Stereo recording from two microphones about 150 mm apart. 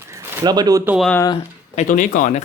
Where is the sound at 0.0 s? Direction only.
20° right (ahead or behind).